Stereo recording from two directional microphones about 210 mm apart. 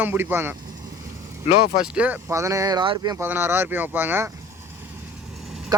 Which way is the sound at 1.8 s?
5° right (ahead or behind).